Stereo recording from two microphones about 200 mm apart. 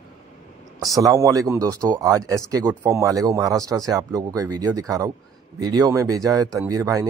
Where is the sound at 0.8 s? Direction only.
15° right (ahead or behind).